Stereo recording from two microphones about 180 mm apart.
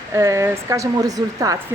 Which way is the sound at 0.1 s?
15° right (ahead or behind).